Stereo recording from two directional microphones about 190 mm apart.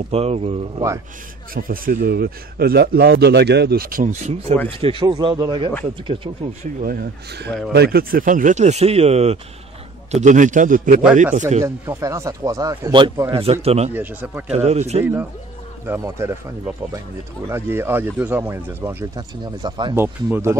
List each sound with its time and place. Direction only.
0.1 s speech: 30° right (ahead or behind)
1.5 s speech: 50° right (ahead or behind); by 6.3 s 25° right (ahead or behind)
6.8 s speech: 50° right (ahead or behind)
11.6 s speech: 15° right (ahead or behind); by 13.9 s 35° right (ahead or behind)
13.9 s speech: 10° right (ahead or behind)
14.5 s speech: 35° right (ahead or behind)
15.8 s speech: 15° right (ahead or behind)